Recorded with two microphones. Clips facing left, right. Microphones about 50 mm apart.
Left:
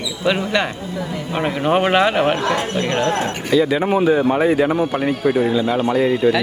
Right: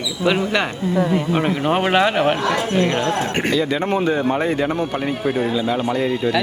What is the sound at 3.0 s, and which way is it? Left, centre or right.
Speech, left.